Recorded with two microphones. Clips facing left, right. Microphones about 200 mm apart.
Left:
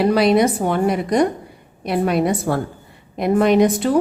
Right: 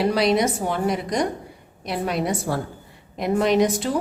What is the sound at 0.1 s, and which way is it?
A woman's voice, 55° left (ahead or behind).